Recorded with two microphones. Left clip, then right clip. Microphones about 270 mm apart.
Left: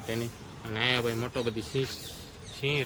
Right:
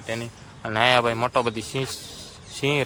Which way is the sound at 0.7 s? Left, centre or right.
Centre.